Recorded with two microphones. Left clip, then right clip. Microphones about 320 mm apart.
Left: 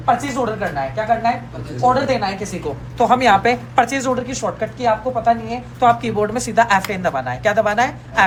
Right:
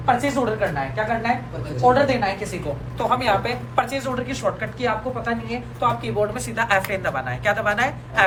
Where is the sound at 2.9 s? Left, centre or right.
Left.